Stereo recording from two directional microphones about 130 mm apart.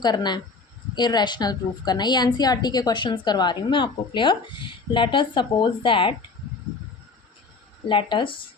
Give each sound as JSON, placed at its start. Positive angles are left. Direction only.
{"t": 0.0, "sound": "a woman's voice", "side_deg": 35}
{"t": 7.9, "sound": "a woman's voice", "side_deg": 40}